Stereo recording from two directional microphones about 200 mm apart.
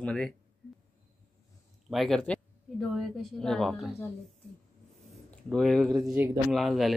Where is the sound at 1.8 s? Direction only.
Centre (ahead or behind).